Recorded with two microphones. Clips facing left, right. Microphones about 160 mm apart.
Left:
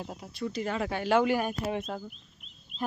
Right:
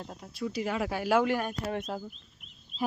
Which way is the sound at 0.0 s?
5° left (ahead or behind).